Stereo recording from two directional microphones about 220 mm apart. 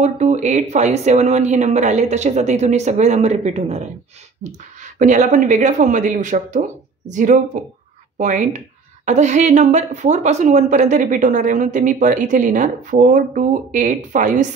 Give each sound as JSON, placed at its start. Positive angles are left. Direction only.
{"t": 0.0, "sound": "a woman's voice", "side_deg": -30}